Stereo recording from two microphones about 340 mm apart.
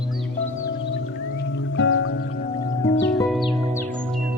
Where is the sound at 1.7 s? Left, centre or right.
Left.